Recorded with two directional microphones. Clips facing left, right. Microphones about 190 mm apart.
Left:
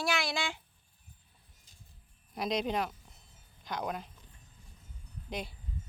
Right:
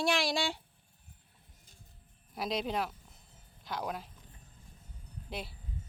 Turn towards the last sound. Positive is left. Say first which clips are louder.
# left 2 dB
turn(degrees=-5)  # may be behind; listen again after turning